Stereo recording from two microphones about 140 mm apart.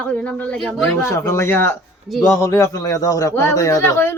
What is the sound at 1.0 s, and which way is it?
Speech, 20° left (ahead or behind).